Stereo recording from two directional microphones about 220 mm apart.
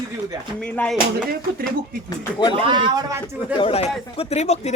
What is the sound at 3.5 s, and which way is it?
Speech, 25° left (ahead or behind).